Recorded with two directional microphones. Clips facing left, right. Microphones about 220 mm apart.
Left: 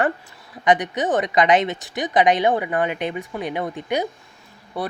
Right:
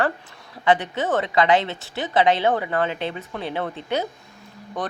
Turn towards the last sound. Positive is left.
turn(degrees=10)  # may be behind; listen again after turning